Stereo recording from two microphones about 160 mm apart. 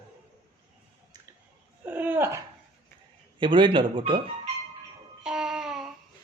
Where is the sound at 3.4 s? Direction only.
30° right (ahead or behind).